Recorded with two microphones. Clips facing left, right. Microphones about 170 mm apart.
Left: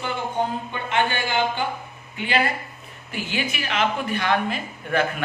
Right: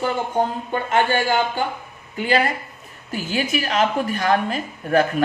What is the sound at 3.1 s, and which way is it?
A woman's voice, 40° right (ahead or behind).